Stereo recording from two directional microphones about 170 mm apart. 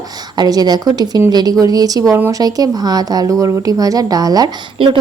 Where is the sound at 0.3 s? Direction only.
25° right (ahead or behind).